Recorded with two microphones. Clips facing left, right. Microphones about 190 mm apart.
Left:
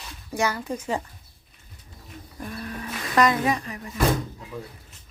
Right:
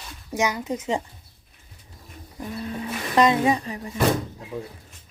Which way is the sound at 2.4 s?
20° right (ahead or behind).